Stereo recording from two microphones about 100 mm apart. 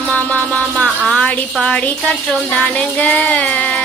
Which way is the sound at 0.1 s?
15° left (ahead or behind).